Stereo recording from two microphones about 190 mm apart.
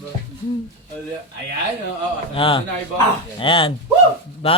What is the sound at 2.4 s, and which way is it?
Speech, 25° left (ahead or behind).